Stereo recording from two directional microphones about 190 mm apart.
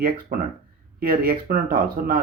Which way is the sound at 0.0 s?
50° right (ahead or behind).